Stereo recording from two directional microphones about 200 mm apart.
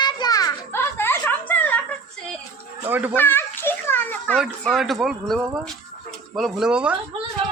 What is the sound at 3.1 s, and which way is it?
Children playing, 10° left (ahead or behind).